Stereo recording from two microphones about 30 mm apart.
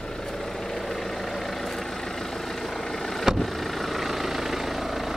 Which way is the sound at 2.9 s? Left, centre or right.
Centre.